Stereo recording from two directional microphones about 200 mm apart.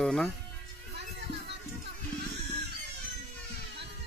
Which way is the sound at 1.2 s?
60° right (ahead or behind).